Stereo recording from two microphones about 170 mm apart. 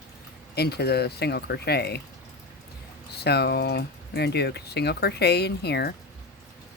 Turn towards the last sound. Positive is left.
turn(degrees=75)  # may be behind; listen again after turning